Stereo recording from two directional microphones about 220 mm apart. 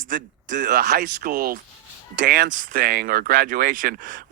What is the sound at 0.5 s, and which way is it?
Speech, 50° right (ahead or behind).